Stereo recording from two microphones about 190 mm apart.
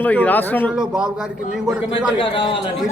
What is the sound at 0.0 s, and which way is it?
Speech, 10° left (ahead or behind).